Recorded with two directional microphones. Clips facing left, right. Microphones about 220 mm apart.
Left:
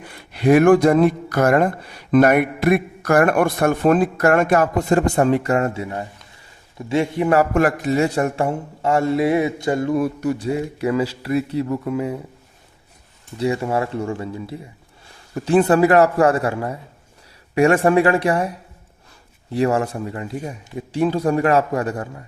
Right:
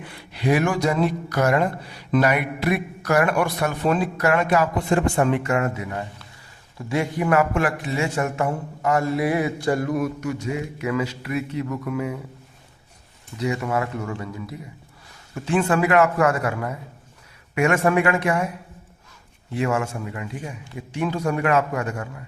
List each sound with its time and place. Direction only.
0.0 s speech: 45° left (ahead or behind); by 7.4 s 25° left (ahead or behind)
7.5 s speech: 40° left (ahead or behind)
13.3 s speech: 30° left (ahead or behind)